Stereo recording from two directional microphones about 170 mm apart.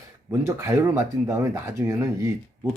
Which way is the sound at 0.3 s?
15° right (ahead or behind).